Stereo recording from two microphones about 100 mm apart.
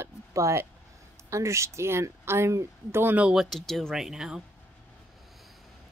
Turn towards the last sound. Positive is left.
turn(degrees=-5)  # may be behind; listen again after turning